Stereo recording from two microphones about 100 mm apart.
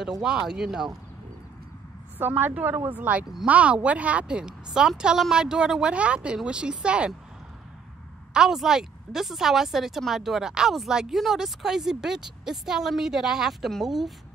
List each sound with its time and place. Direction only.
0.2 s a woman's voice: 5° right (ahead or behind)
2.1 s a woman's voice: 20° right (ahead or behind)
8.3 s a woman's voice: 5° right (ahead or behind)